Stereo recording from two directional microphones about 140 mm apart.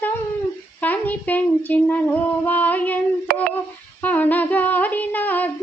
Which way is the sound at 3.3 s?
90° right.